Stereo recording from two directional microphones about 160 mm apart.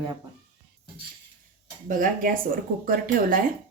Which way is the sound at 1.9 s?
60° right (ahead or behind).